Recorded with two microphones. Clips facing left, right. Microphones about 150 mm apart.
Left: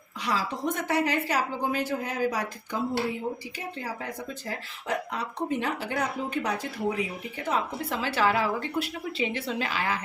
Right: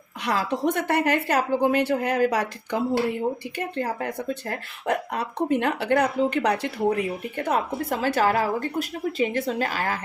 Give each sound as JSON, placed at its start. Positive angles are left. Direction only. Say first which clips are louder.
{"t": 0.2, "sound": "a woman's voice", "louder": "right 5 dB", "side_deg": -60}
{"t": 3.6, "sound": "speech", "louder": "right 10 dB", "side_deg": -60}